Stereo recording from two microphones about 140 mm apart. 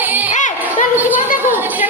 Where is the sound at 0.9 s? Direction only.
15° right (ahead or behind).